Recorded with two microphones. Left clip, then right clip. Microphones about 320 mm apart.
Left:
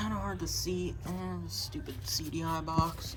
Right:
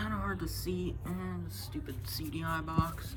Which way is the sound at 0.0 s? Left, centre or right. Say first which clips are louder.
Even; centre.